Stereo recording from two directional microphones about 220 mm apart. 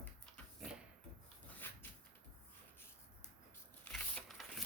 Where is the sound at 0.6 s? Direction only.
5° right (ahead or behind).